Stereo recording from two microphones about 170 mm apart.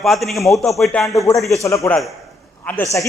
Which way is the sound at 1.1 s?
20° left (ahead or behind).